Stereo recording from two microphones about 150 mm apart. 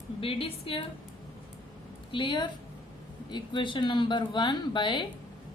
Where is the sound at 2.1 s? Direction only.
30° left (ahead or behind).